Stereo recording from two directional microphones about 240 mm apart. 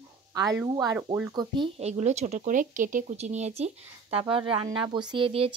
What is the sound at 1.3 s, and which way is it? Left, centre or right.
Speech, centre.